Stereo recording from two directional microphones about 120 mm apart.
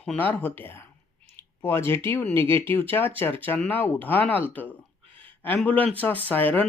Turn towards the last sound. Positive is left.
turn(degrees=15)  # may be behind; listen again after turning